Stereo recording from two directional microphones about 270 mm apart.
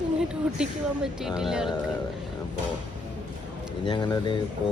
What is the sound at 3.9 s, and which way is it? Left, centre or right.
Speech, centre.